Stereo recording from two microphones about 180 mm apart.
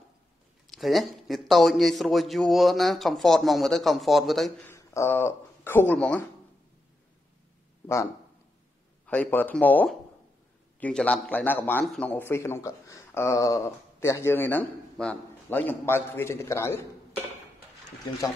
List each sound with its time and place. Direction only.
0.7 s a man's voice: centre (ahead or behind)
4.6 s speech: 15° left (ahead or behind)
7.8 s a man's voice: 15° left (ahead or behind)